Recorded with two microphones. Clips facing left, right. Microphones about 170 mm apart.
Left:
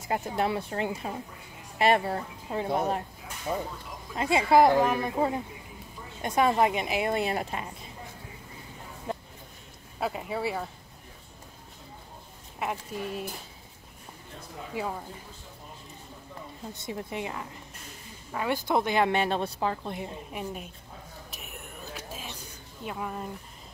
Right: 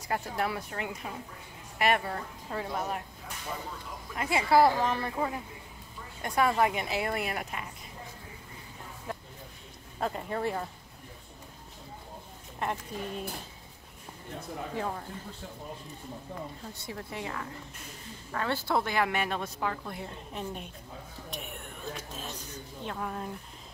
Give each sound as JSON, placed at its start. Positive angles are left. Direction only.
{"t": 0.1, "sound": "a woman's voice", "side_deg": 20}
{"t": 4.1, "sound": "a woman's voice", "side_deg": 25}
{"t": 6.2, "sound": "a woman's voice", "side_deg": 20}
{"t": 9.1, "sound": "a sound", "side_deg": 25}
{"t": 9.9, "sound": "speech", "side_deg": 5}
{"t": 12.5, "sound": "speech", "side_deg": 5}
{"t": 14.8, "sound": "speech", "side_deg": 10}
{"t": 16.7, "sound": "a woman's voice", "side_deg": 20}
{"t": 20.3, "sound": "speech", "side_deg": 5}
{"t": 21.3, "sound": "whispering", "side_deg": 0}
{"t": 22.8, "sound": "speech", "side_deg": 5}